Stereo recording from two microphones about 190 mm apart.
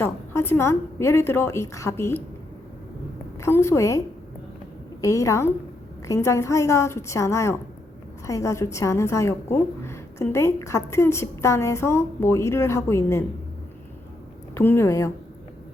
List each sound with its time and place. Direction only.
0.0 s a woman's voice: 10° left (ahead or behind)
3.4 s a woman's voice: 15° left (ahead or behind)
14.5 s a woman's voice: 10° left (ahead or behind)